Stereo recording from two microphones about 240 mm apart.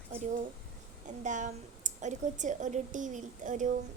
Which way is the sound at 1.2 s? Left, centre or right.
Right.